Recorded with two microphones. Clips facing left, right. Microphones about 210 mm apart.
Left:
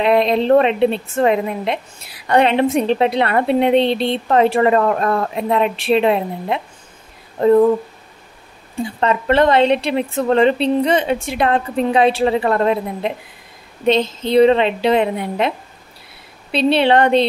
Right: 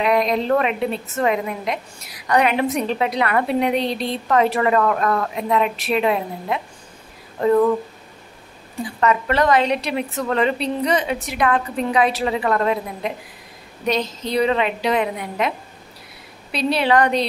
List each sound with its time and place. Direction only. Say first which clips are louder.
0.0 s a woman's voice: left 4 dB; 30° left (ahead or behind)
8.8 s a woman's voice: left 2 dB; 30° left (ahead or behind)
16.5 s a woman's voice: left 4 dB; 25° left (ahead or behind)